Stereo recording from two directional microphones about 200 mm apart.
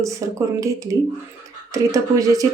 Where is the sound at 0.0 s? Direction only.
15° right (ahead or behind).